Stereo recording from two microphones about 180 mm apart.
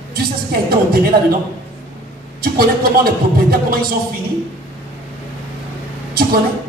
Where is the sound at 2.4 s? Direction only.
55° right (ahead or behind).